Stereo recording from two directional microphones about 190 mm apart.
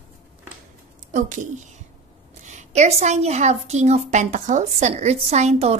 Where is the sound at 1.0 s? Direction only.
40° right (ahead or behind).